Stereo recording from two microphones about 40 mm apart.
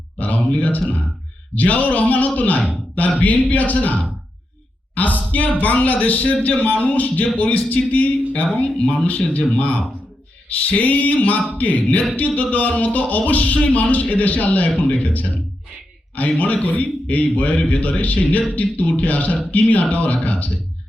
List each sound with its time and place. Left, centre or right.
0.4 s speech: left
0.7 s music: left
1.5 s speech: left
4.9 s music: left
7.3 s speech: left
9.0 s speech: left
11.5 s music: left
14.8 s speech: left
16.2 s music: left
19.6 s speech: left